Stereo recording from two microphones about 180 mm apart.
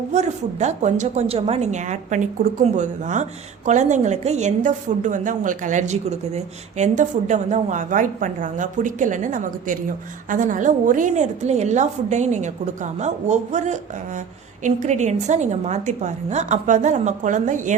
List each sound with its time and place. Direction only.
0.1 s a woman's voice: 40° right (ahead or behind)